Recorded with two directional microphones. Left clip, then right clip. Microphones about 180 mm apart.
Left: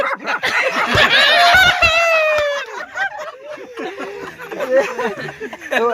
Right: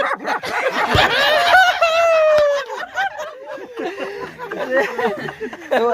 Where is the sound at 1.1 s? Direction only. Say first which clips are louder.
Left 3 dB; 35° right (ahead or behind).